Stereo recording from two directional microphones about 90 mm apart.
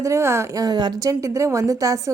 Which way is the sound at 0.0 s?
30° right (ahead or behind).